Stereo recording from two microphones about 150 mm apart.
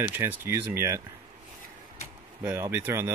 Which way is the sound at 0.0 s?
15° right (ahead or behind).